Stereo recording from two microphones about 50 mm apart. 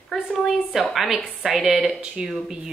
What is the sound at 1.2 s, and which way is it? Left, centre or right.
Speech, centre.